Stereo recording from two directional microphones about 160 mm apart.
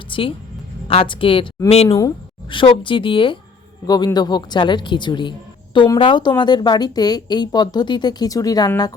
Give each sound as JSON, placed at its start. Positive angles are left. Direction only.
{"t": 0.1, "sound": "a woman's voice", "side_deg": 35}
{"t": 1.9, "sound": "speech", "side_deg": 20}